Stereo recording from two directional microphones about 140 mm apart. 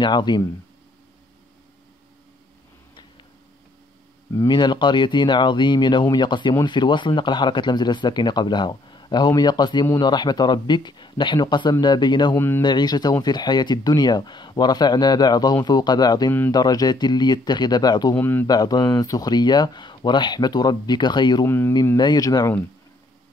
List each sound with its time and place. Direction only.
0.0 s speech: 30° left (ahead or behind)
4.3 s speech: 30° left (ahead or behind)
12.4 s speech: 15° left (ahead or behind)
12.6 s speech: 30° left (ahead or behind)
18.1 s speech: 15° left (ahead or behind)
18.5 s speech: 30° left (ahead or behind)
21.5 s speech: 15° left (ahead or behind)
21.9 s speech: 30° left (ahead or behind)